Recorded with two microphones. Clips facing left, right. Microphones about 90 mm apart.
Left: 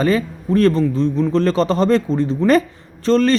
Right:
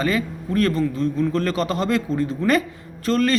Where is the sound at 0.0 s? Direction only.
35° left (ahead or behind).